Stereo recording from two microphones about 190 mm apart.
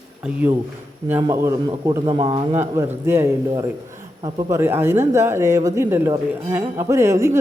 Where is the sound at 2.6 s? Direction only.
15° right (ahead or behind).